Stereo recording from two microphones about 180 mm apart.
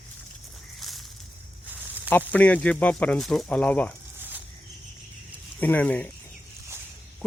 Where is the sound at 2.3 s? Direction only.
10° left (ahead or behind).